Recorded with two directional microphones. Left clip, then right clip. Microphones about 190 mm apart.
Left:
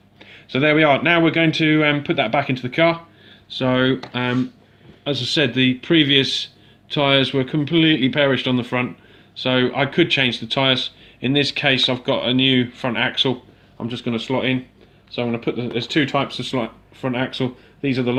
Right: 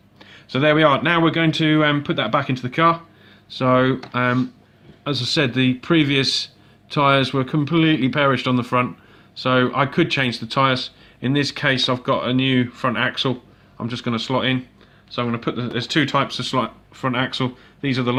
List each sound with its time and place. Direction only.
0.2 s speech: 45° right (ahead or behind)